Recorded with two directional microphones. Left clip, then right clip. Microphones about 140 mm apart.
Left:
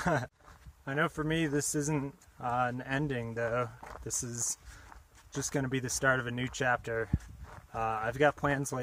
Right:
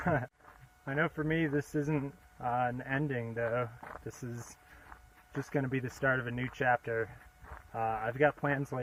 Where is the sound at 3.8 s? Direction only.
20° left (ahead or behind); by 8.6 s 40° left (ahead or behind).